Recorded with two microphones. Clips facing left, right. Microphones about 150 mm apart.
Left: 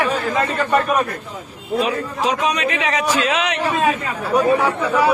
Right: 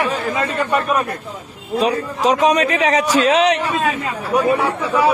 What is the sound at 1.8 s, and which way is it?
A man's voice, 40° right (ahead or behind).